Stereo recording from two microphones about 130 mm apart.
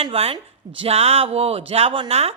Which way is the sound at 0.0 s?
45° right (ahead or behind).